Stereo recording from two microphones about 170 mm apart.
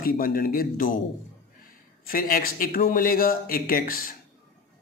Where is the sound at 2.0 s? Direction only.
55° left (ahead or behind).